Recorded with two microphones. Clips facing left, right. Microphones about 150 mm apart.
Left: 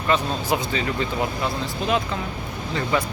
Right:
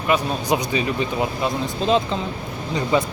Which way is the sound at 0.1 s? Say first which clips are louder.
Right 2 dB; 15° right (ahead or behind).